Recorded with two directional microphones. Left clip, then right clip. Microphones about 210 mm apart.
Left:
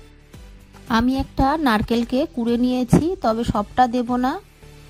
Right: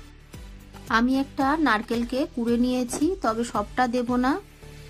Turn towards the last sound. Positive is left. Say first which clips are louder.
# left 2 dB
turn(degrees=40)  # may be behind; listen again after turning